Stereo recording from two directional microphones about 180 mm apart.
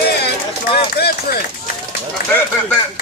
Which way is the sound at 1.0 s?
65° left (ahead or behind).